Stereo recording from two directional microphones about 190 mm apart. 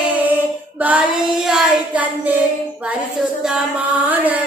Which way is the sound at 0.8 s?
10° right (ahead or behind).